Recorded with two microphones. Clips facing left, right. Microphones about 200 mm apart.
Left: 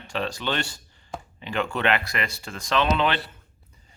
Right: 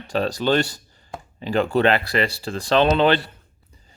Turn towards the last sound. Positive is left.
turn(degrees=-35)  # may be behind; listen again after turning